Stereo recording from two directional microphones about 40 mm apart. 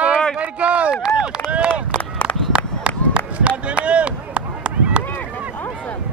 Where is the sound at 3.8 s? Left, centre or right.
Right.